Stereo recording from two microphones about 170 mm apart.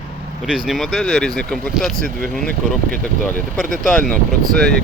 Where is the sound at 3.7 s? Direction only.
Centre (ahead or behind).